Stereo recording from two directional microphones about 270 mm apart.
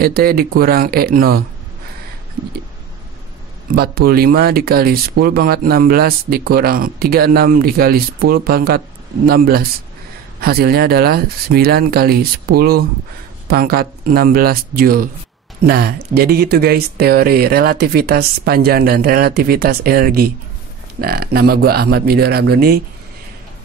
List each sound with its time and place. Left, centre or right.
0.0 s speech: right
3.7 s speech: right